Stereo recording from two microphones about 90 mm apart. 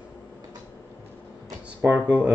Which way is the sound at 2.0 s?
20° right (ahead or behind).